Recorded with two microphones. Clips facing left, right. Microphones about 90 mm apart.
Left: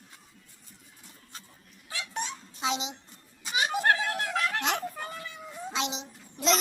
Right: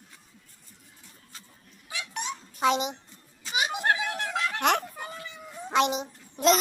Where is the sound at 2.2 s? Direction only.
20° right (ahead or behind).